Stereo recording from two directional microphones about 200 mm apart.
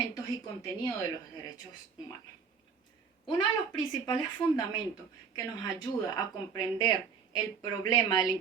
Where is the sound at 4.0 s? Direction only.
20° left (ahead or behind).